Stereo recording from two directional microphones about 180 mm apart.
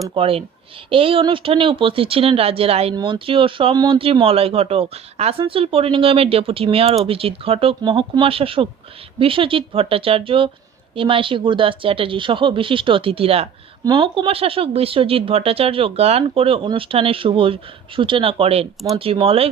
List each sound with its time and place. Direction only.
0.1 s speech: 30° right (ahead or behind)